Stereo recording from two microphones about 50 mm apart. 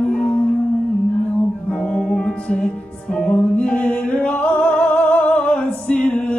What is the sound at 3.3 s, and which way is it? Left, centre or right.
Music, left.